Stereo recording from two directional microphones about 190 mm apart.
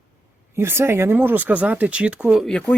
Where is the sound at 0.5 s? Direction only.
15° right (ahead or behind).